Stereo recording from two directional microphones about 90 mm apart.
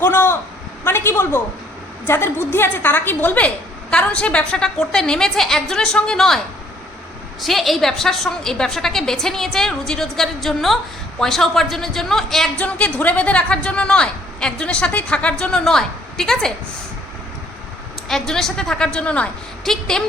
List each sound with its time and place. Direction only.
0.0 s a sound: 25° left (ahead or behind)
0.9 s a woman's voice: 25° left (ahead or behind); by 6.4 s 5° left (ahead or behind)
7.4 s a woman's voice: centre (ahead or behind)
12.5 s a woman's voice: 15° left (ahead or behind)
18.1 s a woman's voice: 5° left (ahead or behind)